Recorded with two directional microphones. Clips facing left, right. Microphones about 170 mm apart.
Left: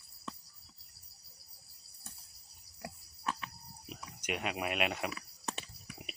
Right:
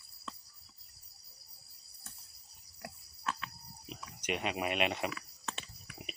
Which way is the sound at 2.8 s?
15° left (ahead or behind).